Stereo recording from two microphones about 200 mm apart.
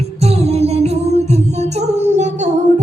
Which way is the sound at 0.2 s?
30° right (ahead or behind).